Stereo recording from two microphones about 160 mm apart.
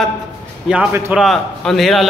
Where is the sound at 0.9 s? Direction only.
15° right (ahead or behind).